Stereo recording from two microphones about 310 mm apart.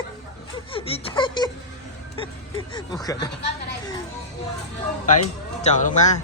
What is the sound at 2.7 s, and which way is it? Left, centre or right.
Speech, centre.